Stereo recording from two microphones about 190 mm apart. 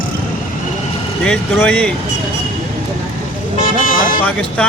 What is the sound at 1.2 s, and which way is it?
Speech, 5° left (ahead or behind).